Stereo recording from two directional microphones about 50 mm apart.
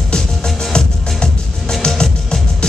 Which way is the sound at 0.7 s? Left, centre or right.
Centre.